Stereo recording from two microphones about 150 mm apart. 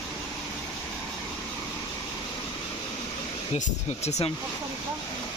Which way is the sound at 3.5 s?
45° left (ahead or behind).